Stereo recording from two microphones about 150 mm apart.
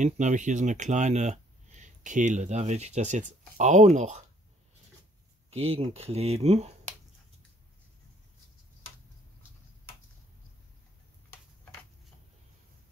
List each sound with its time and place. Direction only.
0.0 s speech: 55° right (ahead or behind)
5.5 s speech: 40° right (ahead or behind)